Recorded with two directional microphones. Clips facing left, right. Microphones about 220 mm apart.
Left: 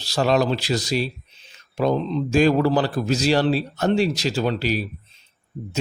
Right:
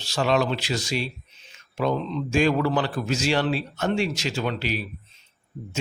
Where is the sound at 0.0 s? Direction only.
40° left (ahead or behind).